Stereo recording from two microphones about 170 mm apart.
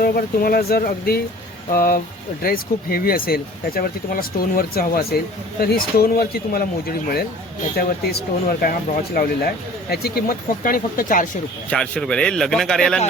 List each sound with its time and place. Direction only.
0.0 s speech: 60° left (ahead or behind)
11.7 s speech: 5° left (ahead or behind)